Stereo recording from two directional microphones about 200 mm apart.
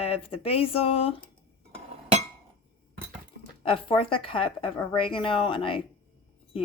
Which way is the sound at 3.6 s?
25° left (ahead or behind).